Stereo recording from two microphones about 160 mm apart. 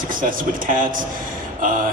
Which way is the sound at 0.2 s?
60° right (ahead or behind).